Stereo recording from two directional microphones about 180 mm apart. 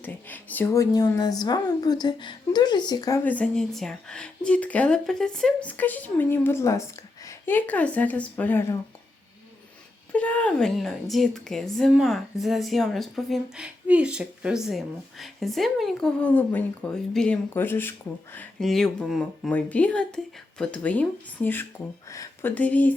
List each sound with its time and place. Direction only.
0.0 s speech: 10° left (ahead or behind)
3.2 s speech: 5° left (ahead or behind)
10.1 s speech: 10° left (ahead or behind)